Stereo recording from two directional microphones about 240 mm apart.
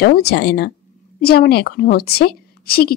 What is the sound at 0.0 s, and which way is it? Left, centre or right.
A woman's voice, left.